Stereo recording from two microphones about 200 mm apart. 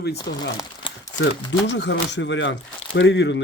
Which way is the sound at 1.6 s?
60° left (ahead or behind).